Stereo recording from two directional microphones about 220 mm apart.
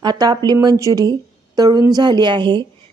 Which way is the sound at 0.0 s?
20° right (ahead or behind).